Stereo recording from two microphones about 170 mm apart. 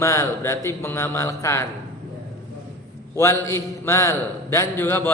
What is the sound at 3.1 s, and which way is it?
Speech, 15° left (ahead or behind).